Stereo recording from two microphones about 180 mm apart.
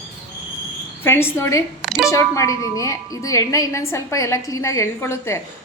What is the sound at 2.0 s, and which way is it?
A woman's voice, 15° left (ahead or behind).